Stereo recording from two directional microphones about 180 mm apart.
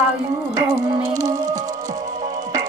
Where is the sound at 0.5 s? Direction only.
20° right (ahead or behind).